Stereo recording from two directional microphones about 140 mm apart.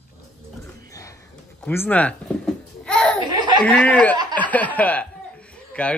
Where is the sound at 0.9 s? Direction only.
25° left (ahead or behind).